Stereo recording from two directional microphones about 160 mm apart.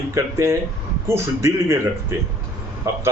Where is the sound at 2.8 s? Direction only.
20° right (ahead or behind).